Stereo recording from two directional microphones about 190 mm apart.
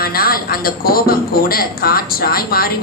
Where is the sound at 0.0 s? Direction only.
50° left (ahead or behind).